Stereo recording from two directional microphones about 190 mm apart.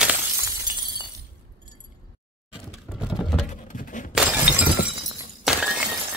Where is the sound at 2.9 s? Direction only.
Centre (ahead or behind).